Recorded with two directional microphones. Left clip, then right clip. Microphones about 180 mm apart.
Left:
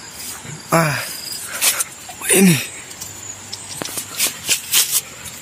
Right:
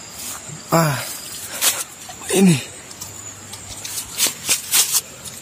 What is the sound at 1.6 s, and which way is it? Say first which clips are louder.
Dog: left 1 dB; 15° right (ahead or behind).